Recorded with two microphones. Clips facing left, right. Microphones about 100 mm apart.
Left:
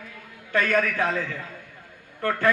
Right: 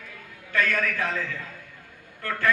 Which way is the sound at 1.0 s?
25° left (ahead or behind).